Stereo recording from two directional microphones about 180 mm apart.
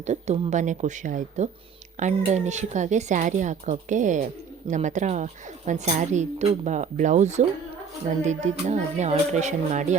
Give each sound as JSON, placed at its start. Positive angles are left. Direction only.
{"t": 0.0, "sound": "a woman's voice", "side_deg": -40}